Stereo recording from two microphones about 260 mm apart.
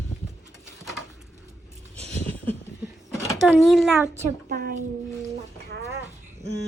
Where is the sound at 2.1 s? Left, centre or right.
Centre.